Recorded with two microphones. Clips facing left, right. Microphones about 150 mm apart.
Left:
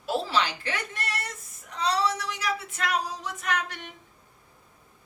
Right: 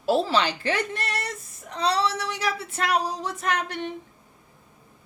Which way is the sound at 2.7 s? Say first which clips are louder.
Right 4 dB; 30° right (ahead or behind).